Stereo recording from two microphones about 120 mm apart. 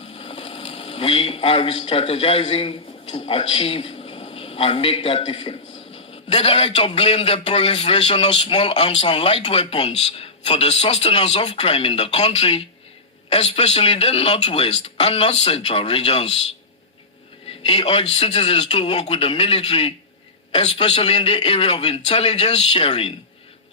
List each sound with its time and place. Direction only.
0.1 s a man's voice: 55° left (ahead or behind)
17.7 s a man's voice: 50° left (ahead or behind)